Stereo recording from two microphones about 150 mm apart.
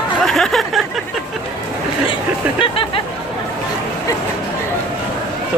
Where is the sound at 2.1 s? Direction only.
35° left (ahead or behind).